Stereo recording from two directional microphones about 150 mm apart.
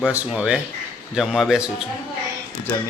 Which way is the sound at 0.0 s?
10° right (ahead or behind).